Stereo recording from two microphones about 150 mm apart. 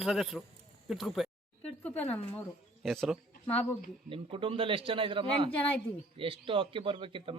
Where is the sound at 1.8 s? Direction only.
10° left (ahead or behind).